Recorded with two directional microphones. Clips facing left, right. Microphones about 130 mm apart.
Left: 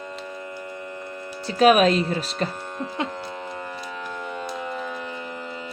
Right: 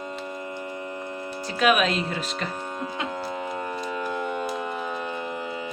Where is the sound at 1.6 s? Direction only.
40° left (ahead or behind).